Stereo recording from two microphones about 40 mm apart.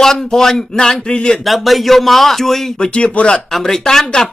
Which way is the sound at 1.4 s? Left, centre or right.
Centre.